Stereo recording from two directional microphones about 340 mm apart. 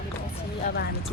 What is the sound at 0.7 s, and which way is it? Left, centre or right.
Speech, left.